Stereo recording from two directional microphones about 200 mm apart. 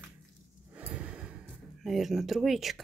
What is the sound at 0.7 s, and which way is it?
Gasp, 5° right (ahead or behind).